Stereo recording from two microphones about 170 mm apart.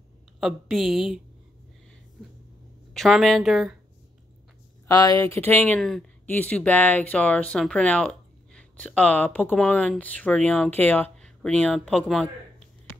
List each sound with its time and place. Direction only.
0.4 s speech: centre (ahead or behind)
2.9 s speech: centre (ahead or behind)
4.8 s speech: 20° left (ahead or behind)
5.8 s speech: centre (ahead or behind)